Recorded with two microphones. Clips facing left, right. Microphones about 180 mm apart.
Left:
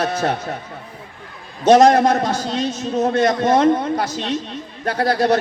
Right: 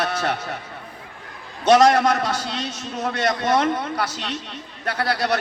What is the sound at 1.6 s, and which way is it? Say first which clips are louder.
A man's voice: left 4 dB; 30° left (ahead or behind).